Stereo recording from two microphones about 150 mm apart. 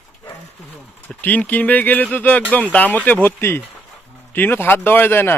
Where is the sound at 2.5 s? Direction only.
10° left (ahead or behind).